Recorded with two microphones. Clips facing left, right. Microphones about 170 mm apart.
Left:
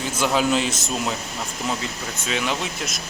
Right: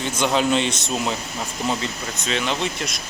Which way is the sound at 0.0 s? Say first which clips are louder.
Right 1 dB; 5° left (ahead or behind).